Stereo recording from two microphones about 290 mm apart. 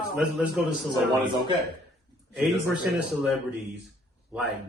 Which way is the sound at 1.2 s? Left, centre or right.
Centre.